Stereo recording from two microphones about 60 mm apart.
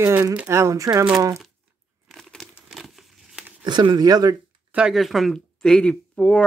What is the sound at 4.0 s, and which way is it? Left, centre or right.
Speech, right.